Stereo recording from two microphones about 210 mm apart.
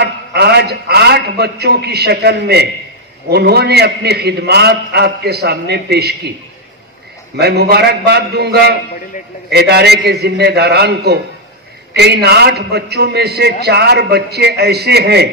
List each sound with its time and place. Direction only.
0.0 s a man's voice: 50° right (ahead or behind)
7.3 s a man's voice: 50° right (ahead or behind)